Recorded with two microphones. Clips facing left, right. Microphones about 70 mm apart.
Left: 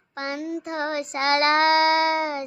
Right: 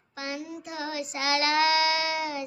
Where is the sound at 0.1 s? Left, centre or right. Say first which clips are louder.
Left 6 dB; left.